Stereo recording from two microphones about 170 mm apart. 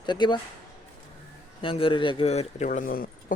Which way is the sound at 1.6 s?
30° left (ahead or behind).